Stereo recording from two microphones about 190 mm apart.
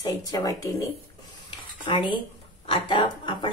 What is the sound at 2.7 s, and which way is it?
Speech, 25° left (ahead or behind).